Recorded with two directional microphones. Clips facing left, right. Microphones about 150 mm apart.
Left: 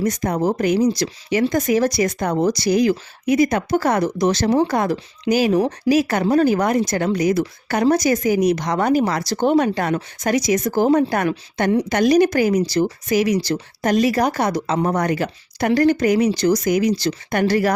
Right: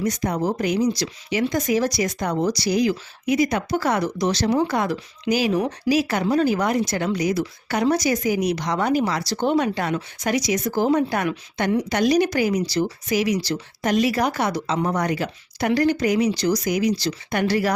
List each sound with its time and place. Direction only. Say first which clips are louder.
0.0 s speech: left 3 dB; 45° left (ahead or behind)
5.5 s speech: left 4 dB; 30° left (ahead or behind)
5.9 s speech: left 3 dB; 50° left (ahead or behind)